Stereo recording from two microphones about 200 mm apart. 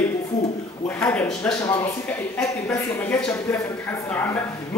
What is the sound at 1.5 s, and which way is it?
Speech, 15° left (ahead or behind).